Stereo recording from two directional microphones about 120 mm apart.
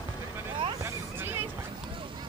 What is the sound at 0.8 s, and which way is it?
Hubbub, 20° right (ahead or behind).